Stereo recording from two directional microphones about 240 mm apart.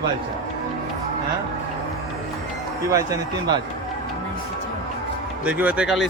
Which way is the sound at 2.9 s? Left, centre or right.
Centre.